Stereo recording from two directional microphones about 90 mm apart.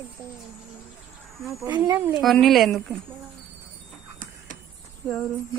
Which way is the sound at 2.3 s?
Centre (ahead or behind).